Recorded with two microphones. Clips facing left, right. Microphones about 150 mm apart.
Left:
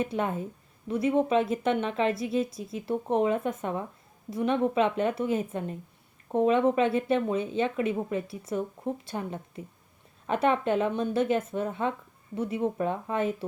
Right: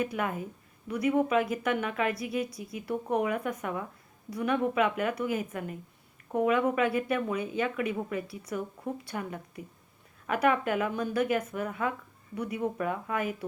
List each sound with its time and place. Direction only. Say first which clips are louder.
0.0 s a woman's voice: left 2 dB; 25° left (ahead or behind)